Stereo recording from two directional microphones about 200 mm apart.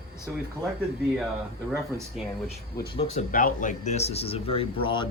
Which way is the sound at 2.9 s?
40° left (ahead or behind).